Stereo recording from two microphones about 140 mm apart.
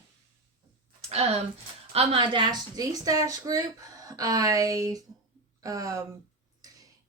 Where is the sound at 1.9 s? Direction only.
40° right (ahead or behind).